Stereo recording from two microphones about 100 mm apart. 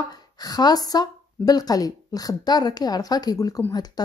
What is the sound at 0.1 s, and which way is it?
Speech, 40° left (ahead or behind).